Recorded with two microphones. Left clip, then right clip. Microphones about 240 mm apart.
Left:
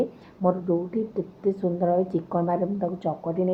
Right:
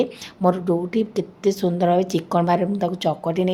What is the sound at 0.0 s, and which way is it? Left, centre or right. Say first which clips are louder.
Speech: right 4 dB; right.